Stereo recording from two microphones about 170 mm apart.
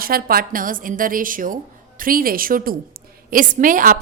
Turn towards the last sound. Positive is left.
turn(degrees=-50)  # may be behind; listen again after turning